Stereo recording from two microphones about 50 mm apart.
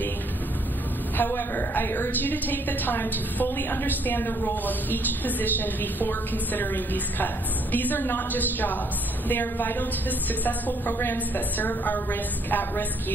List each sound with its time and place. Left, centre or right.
1.1 s a woman's voice: left